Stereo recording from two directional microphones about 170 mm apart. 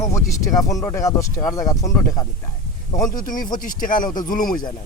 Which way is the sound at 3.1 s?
50° left (ahead or behind).